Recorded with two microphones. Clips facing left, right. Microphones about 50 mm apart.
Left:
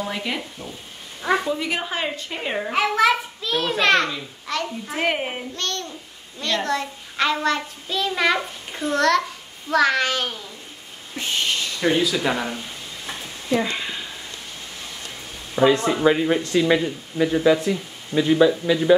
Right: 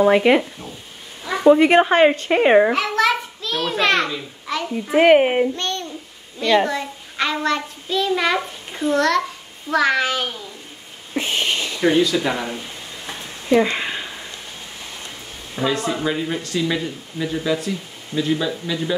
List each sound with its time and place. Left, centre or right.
0.0 s speech: right
1.4 s a woman's voice: right
2.7 s a sound: centre
4.9 s speech: right
5.6 s babbling: centre
6.4 s a child's voice: centre
11.1 s a sound: centre
11.9 s a child's voice: centre
13.5 s a sound: centre
15.6 s a child's voice: centre
15.9 s speech: centre